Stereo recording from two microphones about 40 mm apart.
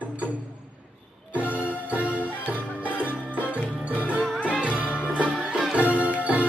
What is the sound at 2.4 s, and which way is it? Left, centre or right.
Music, left.